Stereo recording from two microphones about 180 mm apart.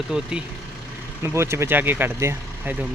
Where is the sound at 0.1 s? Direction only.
5° right (ahead or behind).